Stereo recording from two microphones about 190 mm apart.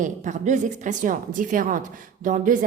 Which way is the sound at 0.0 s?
40° right (ahead or behind).